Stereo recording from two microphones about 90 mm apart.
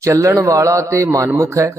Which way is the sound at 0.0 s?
30° right (ahead or behind).